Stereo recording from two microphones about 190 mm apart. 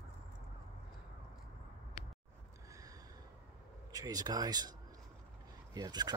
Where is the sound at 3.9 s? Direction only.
20° right (ahead or behind).